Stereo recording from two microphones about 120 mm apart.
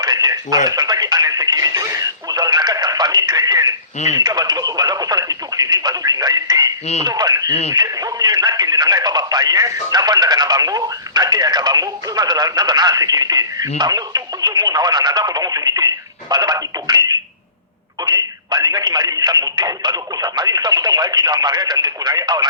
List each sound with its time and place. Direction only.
0.0 s radio: 35° right (ahead or behind)
4.2 s telephone: 35° right (ahead or behind)
7.0 s speech: 35° right (ahead or behind)
18.0 s radio: 35° right (ahead or behind)